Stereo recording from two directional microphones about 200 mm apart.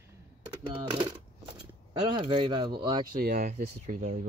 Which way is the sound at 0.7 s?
25° right (ahead or behind).